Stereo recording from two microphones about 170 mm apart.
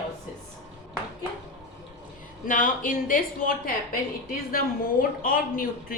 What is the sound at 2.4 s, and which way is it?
A woman's voice, 55° left (ahead or behind).